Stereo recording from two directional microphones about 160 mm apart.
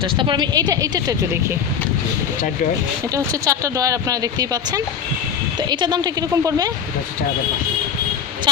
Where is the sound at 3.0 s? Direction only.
20° right (ahead or behind).